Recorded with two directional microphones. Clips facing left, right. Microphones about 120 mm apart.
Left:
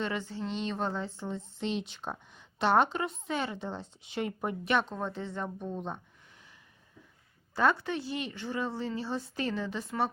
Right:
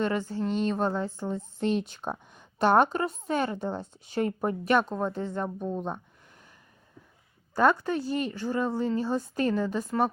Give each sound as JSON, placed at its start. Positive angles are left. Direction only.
{"t": 0.0, "sound": "a woman's voice", "side_deg": -45}
{"t": 7.5, "sound": "a woman's voice", "side_deg": -45}